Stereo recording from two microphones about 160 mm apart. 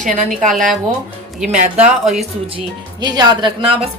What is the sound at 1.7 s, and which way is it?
Speech, centre (ahead or behind).